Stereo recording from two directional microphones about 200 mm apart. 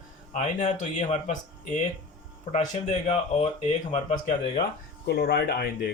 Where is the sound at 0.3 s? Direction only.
40° left (ahead or behind).